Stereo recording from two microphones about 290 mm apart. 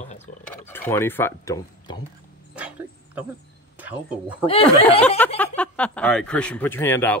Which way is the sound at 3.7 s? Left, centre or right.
Centre.